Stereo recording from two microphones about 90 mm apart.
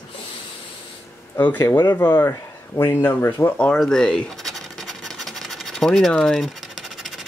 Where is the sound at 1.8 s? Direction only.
25° left (ahead or behind).